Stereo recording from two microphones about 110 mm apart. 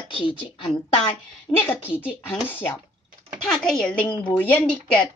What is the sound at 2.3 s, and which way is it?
Speech, 15° left (ahead or behind).